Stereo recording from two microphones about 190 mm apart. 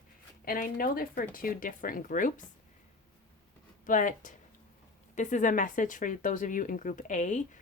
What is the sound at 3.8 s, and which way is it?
Speech, 45° left (ahead or behind).